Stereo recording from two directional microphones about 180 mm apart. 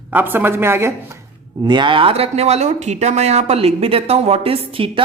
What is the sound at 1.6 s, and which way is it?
Speech, 25° right (ahead or behind).